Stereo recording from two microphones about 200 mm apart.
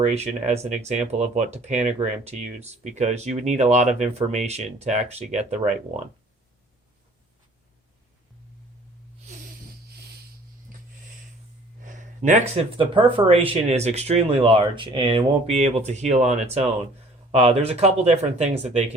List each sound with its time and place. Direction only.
0.0 s speech: 30° right (ahead or behind)
11.8 s a sound: 40° right (ahead or behind)
12.7 s speech: 25° right (ahead or behind)